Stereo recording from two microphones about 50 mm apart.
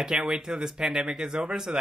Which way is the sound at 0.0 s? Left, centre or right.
Centre.